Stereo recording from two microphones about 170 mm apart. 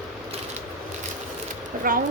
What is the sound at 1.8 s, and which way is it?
Speech, 55° right (ahead or behind).